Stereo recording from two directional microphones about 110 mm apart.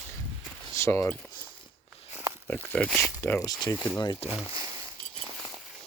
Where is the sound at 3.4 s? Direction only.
30° left (ahead or behind).